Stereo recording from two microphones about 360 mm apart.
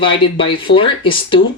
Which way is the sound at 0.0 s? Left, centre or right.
Centre.